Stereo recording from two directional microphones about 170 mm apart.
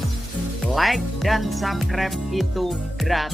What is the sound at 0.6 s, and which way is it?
Speech, centre (ahead or behind).